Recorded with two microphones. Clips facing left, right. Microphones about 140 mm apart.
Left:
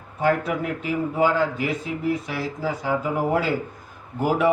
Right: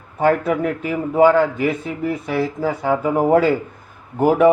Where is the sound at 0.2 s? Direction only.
50° right (ahead or behind).